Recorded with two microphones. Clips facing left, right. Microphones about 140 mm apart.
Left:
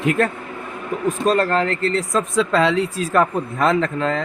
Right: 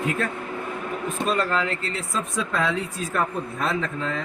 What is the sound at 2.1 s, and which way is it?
Speech, 85° left.